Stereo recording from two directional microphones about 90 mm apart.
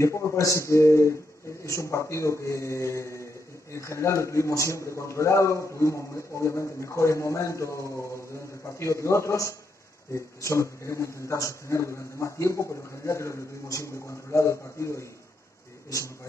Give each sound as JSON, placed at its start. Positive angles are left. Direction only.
{"t": 0.0, "sound": "a man's voice", "side_deg": 35}